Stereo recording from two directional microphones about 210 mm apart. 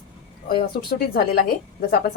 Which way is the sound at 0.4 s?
45° left (ahead or behind).